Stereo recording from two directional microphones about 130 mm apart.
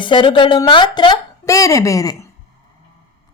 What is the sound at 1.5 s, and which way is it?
Speech, 25° left (ahead or behind).